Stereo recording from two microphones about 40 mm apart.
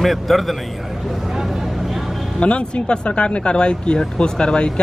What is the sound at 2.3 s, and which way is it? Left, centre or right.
Speech, left.